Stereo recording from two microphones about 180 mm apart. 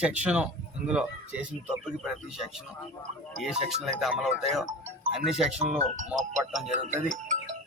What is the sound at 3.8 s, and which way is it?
Speech, centre (ahead or behind).